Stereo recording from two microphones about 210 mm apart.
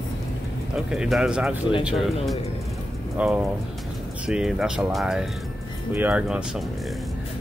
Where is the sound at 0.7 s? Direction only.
5° right (ahead or behind).